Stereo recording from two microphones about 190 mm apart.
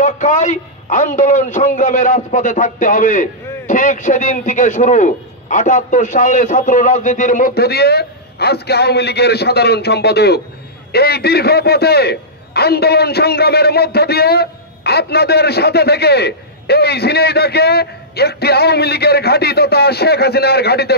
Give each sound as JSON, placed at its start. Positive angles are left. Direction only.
{"t": 0.0, "sound": "a man's voice", "side_deg": 40}